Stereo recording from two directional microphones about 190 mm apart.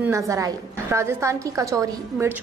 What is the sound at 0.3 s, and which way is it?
A woman's voice, 15° right (ahead or behind).